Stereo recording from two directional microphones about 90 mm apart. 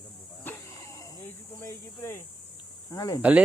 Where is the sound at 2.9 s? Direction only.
40° left (ahead or behind).